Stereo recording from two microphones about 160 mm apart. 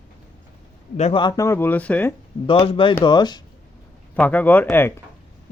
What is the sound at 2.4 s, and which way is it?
Speech, 35° left (ahead or behind).